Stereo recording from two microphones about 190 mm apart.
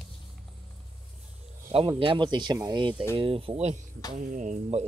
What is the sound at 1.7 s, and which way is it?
Speech, 25° right (ahead or behind).